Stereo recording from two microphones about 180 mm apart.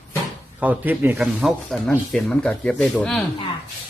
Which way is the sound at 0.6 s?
10° right (ahead or behind).